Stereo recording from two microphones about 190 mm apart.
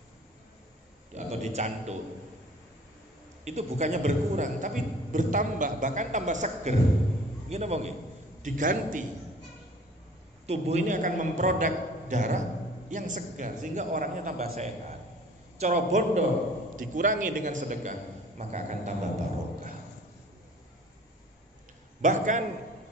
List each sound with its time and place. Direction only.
1.1 s a man's voice: 35° right (ahead or behind)
3.4 s a man's voice: 35° right (ahead or behind)
10.4 s a man's voice: 35° right (ahead or behind)
22.0 s a man's voice: 40° right (ahead or behind)